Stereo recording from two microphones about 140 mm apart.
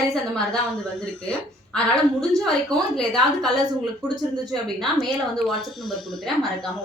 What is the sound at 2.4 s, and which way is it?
A woman's voice, 5° left (ahead or behind).